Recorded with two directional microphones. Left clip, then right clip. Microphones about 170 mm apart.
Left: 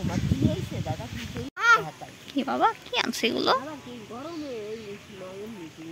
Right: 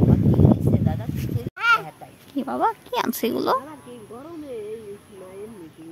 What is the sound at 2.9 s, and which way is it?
Speech, 40° right (ahead or behind).